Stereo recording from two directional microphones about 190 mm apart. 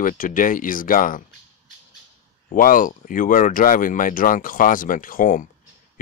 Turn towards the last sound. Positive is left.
turn(degrees=45)  # may be behind; listen again after turning